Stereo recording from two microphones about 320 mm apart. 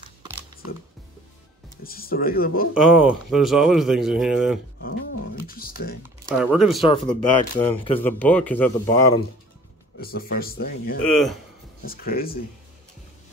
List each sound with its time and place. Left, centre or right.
1.8 s a man's voice: left
2.7 s speech: centre
4.7 s speech: left
6.2 s speech: centre
6.8 s speech: centre
9.9 s a man's voice: left